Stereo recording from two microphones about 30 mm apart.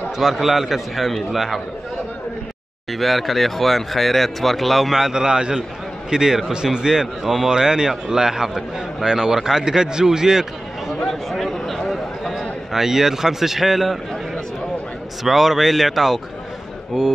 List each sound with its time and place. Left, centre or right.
0.2 s a man's voice: centre
2.9 s speech: centre
4.9 s a man's voice: centre
11.1 s speech: centre
11.9 s a sound: centre
12.7 s a man's voice: centre
15.2 s a man's voice: centre